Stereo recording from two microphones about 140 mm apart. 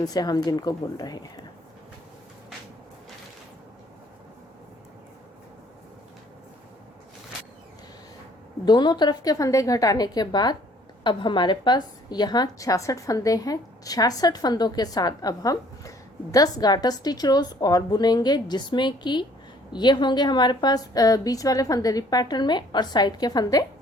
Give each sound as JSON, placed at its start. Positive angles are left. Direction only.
{"t": 0.0, "sound": "a woman's voice", "side_deg": 25}
{"t": 8.6, "sound": "a woman's voice", "side_deg": 30}